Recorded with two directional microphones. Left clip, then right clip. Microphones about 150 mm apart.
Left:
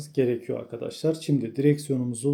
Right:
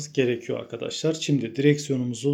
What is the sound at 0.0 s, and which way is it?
Speech, 5° left (ahead or behind).